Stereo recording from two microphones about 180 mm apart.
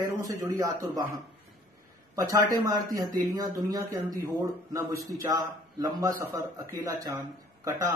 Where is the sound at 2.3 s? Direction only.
15° right (ahead or behind).